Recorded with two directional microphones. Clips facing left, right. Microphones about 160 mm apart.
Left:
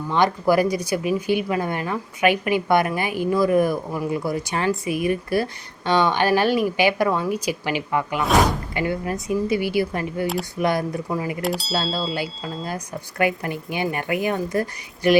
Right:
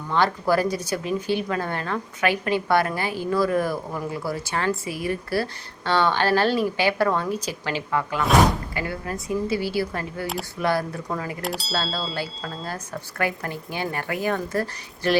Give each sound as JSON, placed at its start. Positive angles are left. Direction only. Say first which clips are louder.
{"t": 0.1, "sound": "speech", "louder": "left 2 dB", "side_deg": 15}
{"t": 11.4, "sound": "a sound", "louder": "left 2 dB", "side_deg": 0}
{"t": 12.6, "sound": "speech", "louder": "left 2 dB", "side_deg": 15}